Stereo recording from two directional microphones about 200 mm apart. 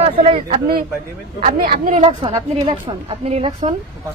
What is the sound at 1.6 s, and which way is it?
Speech, 45° right (ahead or behind).